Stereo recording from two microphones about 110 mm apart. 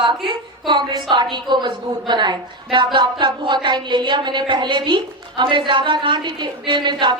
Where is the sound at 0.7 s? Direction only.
45° right (ahead or behind).